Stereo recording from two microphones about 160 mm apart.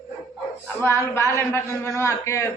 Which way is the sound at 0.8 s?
15° left (ahead or behind).